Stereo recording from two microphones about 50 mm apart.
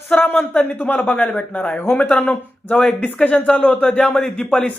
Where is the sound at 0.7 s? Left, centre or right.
Left.